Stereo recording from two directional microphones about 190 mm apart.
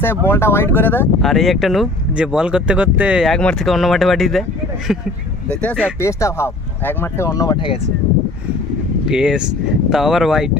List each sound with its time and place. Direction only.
0.0 s speech: 10° left (ahead or behind)
1.2 s speech: centre (ahead or behind)
5.9 s speech: 15° left (ahead or behind)
9.1 s speech: 5° right (ahead or behind)